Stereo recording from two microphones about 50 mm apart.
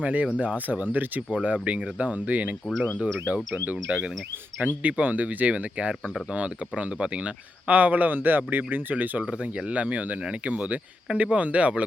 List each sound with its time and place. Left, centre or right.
0.0 s speech: right
3.1 s speech: centre
3.5 s speech: right
9.2 s speech: right